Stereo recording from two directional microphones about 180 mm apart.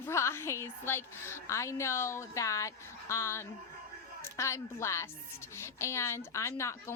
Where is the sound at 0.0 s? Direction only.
15° left (ahead or behind).